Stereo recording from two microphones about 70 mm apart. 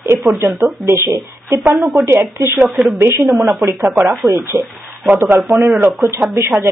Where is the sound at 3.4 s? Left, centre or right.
Right.